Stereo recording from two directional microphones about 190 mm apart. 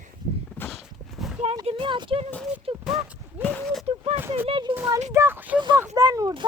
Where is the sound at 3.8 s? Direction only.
30° right (ahead or behind).